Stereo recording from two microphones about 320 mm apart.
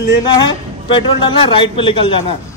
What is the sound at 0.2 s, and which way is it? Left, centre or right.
A man's voice, centre.